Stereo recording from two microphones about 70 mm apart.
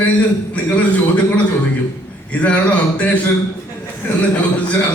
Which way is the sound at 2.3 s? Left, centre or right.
Centre.